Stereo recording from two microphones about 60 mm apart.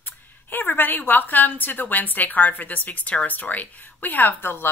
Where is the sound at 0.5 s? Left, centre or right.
Left.